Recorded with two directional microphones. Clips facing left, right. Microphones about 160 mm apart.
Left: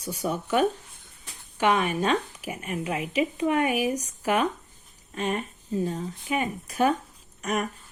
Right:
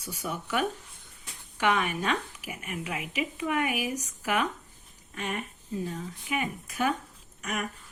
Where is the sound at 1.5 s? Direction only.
25° left (ahead or behind).